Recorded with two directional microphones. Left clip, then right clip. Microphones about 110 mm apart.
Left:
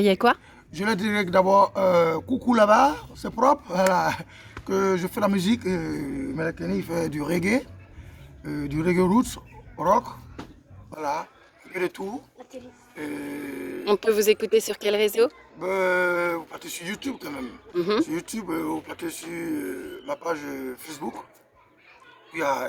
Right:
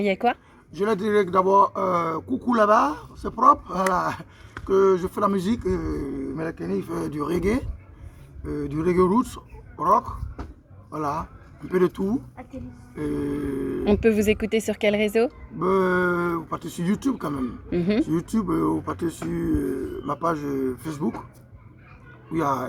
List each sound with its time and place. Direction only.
0.0 s speech: 45° left (ahead or behind); by 12.0 s 30° left (ahead or behind)
13.1 s speech: 35° left (ahead or behind)
13.8 s speech: 55° left (ahead or behind)
15.5 s speech: 30° left (ahead or behind)
17.7 s speech: 60° left (ahead or behind)
18.0 s speech: 30° left (ahead or behind)
22.3 s speech: 30° left (ahead or behind)